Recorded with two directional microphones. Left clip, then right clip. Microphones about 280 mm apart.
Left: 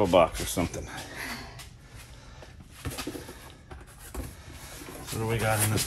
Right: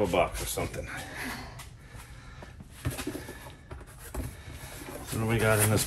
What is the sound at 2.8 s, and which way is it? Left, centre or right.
Pigeon, centre.